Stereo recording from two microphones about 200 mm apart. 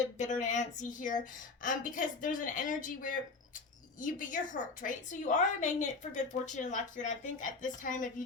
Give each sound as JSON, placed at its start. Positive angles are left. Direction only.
{"t": 0.2, "sound": "a woman's voice", "side_deg": 35}